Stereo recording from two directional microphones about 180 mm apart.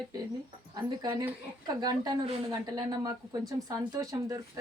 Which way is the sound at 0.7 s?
25° right (ahead or behind).